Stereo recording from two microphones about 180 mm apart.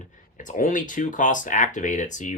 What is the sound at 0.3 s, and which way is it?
Speech, 45° left (ahead or behind).